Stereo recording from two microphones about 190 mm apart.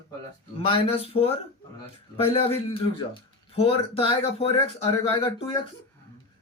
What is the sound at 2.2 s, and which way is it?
Speech, 30° left (ahead or behind).